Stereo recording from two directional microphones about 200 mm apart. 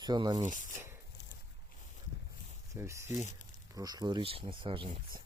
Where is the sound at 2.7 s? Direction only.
15° right (ahead or behind).